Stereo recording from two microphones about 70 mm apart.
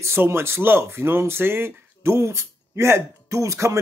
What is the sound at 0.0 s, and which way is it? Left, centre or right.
Speech, right.